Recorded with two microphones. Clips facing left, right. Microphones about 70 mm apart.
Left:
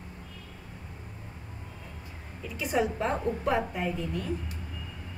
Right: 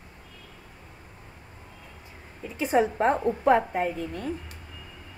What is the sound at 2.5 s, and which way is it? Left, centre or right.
A woman's voice, right.